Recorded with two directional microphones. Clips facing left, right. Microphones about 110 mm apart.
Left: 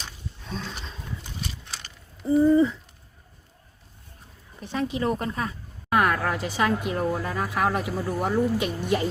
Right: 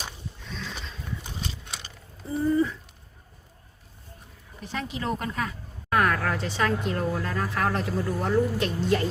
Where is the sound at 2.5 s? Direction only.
20° left (ahead or behind).